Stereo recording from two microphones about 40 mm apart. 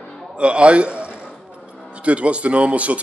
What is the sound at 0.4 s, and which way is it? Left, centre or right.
A man's voice, right.